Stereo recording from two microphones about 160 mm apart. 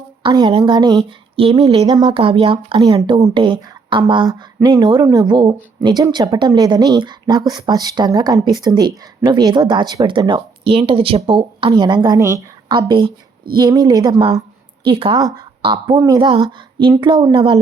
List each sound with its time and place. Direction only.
0.2 s a woman's voice: 30° right (ahead or behind)